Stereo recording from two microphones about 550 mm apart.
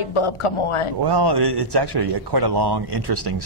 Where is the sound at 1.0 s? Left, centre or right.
Right.